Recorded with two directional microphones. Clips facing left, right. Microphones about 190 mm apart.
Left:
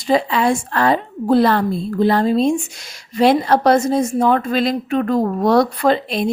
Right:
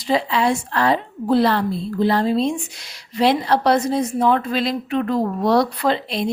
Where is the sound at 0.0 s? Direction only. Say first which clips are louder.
Left 3 dB; 50° left (ahead or behind).